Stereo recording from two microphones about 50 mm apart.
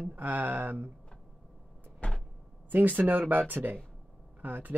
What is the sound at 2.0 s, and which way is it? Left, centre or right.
Vehicle, left.